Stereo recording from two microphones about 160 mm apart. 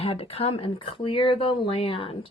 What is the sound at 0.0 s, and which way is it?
A woman's voice, 40° left (ahead or behind).